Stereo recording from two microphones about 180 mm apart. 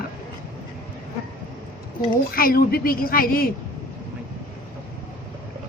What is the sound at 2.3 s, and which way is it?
A woman's voice, 55° left (ahead or behind).